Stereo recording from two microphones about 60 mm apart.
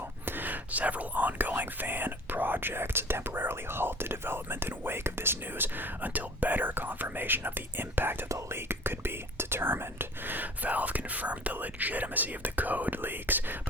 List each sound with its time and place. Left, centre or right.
0.3 s whispering: right